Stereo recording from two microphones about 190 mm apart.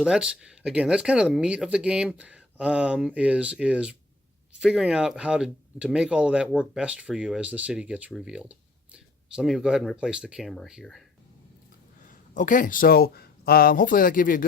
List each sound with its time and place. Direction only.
0.0 s speech: 5° right (ahead or behind)
12.3 s speech: 40° left (ahead or behind)